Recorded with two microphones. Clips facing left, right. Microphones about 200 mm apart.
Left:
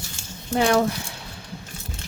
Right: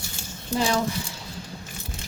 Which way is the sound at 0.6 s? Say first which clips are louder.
Left 5 dB; 60° left (ahead or behind).